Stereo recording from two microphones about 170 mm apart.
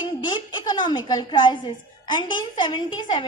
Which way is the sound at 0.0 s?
25° left (ahead or behind).